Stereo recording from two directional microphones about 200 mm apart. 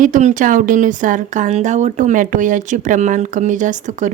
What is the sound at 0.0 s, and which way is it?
Speech, 40° right (ahead or behind).